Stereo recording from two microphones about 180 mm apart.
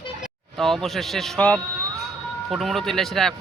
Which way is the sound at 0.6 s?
Centre (ahead or behind).